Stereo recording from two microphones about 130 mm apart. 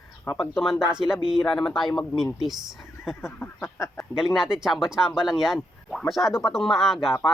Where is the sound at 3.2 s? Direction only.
20° left (ahead or behind).